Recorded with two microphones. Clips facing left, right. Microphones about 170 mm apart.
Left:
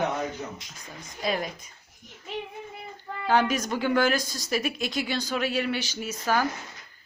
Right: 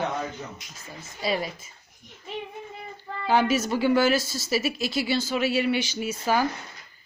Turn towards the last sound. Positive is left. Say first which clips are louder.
# right 2 dB
turn(degrees=-10)  # may be behind; listen again after turning